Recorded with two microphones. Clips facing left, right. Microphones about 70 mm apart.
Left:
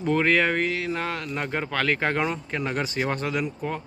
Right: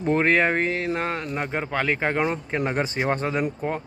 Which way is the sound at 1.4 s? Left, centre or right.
Centre.